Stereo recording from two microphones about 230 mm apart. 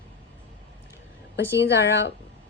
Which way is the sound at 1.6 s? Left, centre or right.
Left.